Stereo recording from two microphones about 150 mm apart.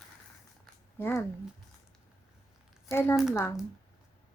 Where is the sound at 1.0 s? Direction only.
15° left (ahead or behind).